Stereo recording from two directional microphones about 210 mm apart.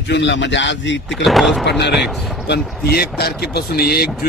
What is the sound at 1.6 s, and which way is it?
Speech, 55° left (ahead or behind).